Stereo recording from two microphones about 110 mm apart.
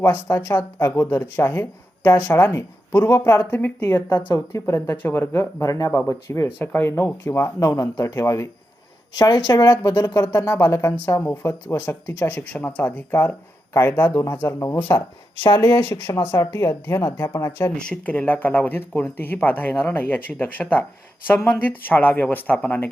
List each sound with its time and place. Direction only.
0.3 s speech: 20° left (ahead or behind)
3.5 s speech: 15° left (ahead or behind); by 9.6 s 40° left (ahead or behind)
10.2 s speech: 25° left (ahead or behind)
17.7 s speech: 10° left (ahead or behind)